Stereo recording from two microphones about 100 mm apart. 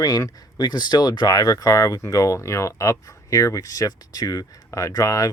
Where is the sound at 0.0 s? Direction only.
35° left (ahead or behind).